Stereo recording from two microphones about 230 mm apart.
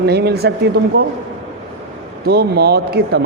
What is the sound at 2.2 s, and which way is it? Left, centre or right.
A man's voice, right.